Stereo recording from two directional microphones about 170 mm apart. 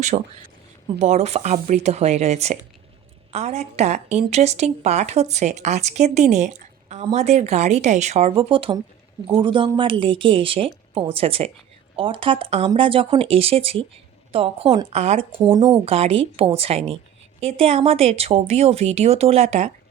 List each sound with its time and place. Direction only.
0.1 s speech: 45° right (ahead or behind)
8.4 s a man's voice: 30° right (ahead or behind)